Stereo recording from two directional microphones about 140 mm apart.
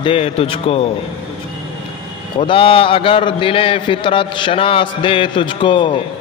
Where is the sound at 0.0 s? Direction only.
45° left (ahead or behind).